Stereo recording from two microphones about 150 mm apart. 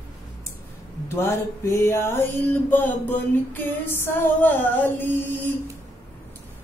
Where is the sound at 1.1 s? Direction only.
15° left (ahead or behind).